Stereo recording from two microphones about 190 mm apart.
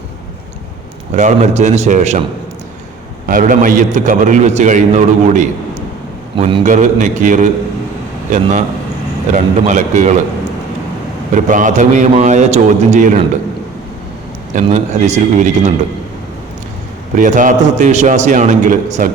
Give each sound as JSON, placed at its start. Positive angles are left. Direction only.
{"t": 1.1, "sound": "a man's voice", "side_deg": -40}
{"t": 3.2, "sound": "a man's voice", "side_deg": -45}
{"t": 11.4, "sound": "a man's voice", "side_deg": -45}
{"t": 14.5, "sound": "a man's voice", "side_deg": -35}
{"t": 17.2, "sound": "a man's voice", "side_deg": -45}